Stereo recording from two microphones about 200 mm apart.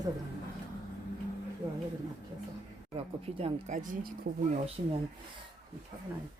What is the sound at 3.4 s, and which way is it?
Speech, 35° right (ahead or behind).